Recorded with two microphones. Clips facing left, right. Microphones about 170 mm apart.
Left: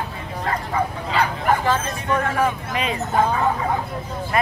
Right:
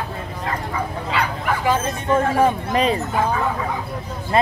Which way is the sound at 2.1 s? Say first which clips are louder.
Right 4 dB; 30° right (ahead or behind).